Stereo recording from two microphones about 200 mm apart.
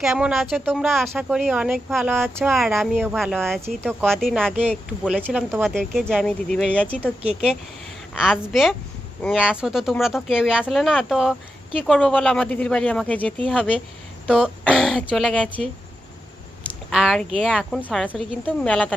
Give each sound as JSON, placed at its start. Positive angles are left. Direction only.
{"t": 0.0, "sound": "speech", "side_deg": -5}
{"t": 5.2, "sound": "speech", "side_deg": -10}
{"t": 5.6, "sound": "a woman's voice", "side_deg": 0}
{"t": 14.3, "sound": "speech", "side_deg": -5}
{"t": 16.9, "sound": "speech", "side_deg": 0}